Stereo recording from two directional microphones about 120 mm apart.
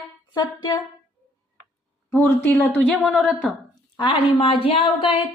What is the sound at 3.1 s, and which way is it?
Speech, 5° right (ahead or behind).